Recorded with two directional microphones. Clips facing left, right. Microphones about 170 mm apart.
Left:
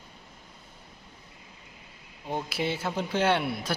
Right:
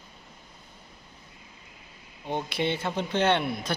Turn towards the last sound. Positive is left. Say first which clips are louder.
# right 1 dB
turn(degrees=5)  # may be behind; listen again after turning